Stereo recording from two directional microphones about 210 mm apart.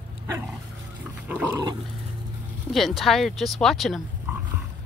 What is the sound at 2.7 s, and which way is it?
Speech, centre (ahead or behind).